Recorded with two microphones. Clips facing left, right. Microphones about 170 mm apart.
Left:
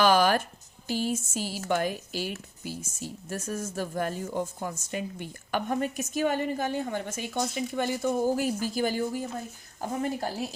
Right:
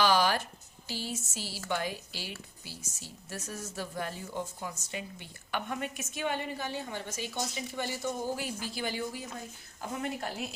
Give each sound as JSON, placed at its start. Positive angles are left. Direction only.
{"t": 0.0, "sound": "a sound", "side_deg": 50}
{"t": 0.9, "sound": "speech", "side_deg": 50}
{"t": 9.8, "sound": "a woman's voice", "side_deg": 35}